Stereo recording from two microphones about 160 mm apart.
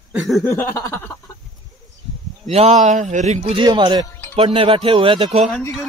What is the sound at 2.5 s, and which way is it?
Speech, 45° right (ahead or behind).